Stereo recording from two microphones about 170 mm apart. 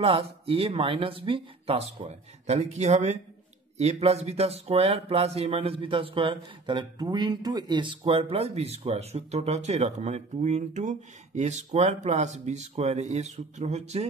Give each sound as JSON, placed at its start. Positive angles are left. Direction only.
{"t": 0.0, "sound": "speech", "side_deg": -35}